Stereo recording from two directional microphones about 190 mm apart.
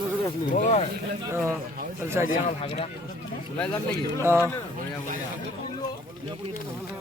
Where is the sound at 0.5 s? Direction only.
40° left (ahead or behind).